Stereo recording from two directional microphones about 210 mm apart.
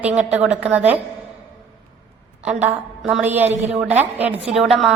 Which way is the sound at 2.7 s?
5° right (ahead or behind).